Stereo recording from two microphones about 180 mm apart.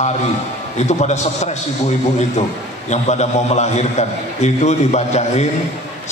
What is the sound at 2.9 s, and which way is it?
A man's voice, 40° left (ahead or behind).